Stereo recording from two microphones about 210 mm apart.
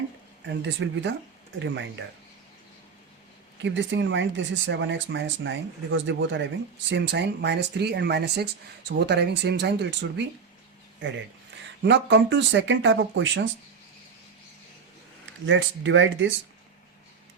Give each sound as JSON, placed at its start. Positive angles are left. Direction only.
{"t": 0.4, "sound": "speech", "side_deg": -55}
{"t": 3.6, "sound": "speech", "side_deg": -60}
{"t": 11.8, "sound": "speech", "side_deg": -55}
{"t": 15.4, "sound": "speech", "side_deg": -65}